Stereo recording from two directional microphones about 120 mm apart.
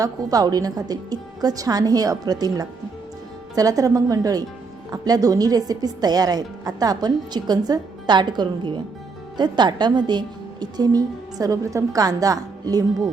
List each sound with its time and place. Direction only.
0.0 s speech: 30° right (ahead or behind)